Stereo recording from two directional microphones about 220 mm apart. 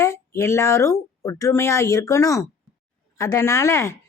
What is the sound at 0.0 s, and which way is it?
A woman's voice, 15° left (ahead or behind).